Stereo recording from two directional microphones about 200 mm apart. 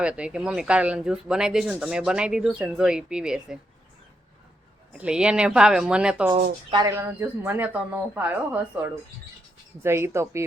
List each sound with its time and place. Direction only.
0.0 s speech: 5° right (ahead or behind)
4.9 s speech: 5° right (ahead or behind)
6.3 s speech: 20° right (ahead or behind)
6.9 s speech: 10° right (ahead or behind)